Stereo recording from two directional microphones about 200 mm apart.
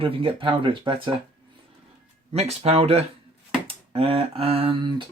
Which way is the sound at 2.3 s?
30° right (ahead or behind).